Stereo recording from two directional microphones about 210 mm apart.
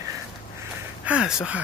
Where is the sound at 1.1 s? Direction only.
5° right (ahead or behind).